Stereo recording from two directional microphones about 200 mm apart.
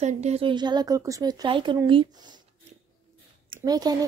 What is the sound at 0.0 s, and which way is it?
A woman's voice, 35° right (ahead or behind).